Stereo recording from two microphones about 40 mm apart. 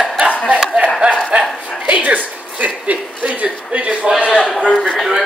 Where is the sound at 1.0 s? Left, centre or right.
Right.